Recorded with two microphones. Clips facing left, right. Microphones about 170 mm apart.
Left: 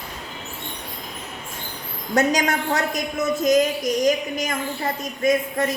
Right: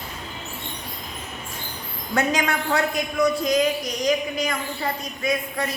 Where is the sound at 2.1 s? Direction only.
40° left (ahead or behind).